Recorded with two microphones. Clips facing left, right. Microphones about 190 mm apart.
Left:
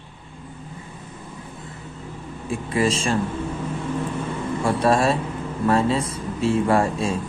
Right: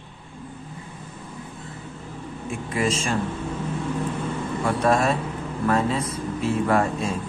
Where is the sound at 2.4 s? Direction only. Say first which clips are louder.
Left 3 dB; 30° left (ahead or behind).